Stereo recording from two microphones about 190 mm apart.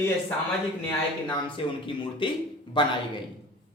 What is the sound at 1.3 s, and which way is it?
Speech, 25° left (ahead or behind).